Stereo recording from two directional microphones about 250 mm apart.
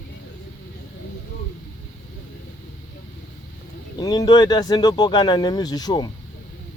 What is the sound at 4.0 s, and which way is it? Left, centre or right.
Speech, centre.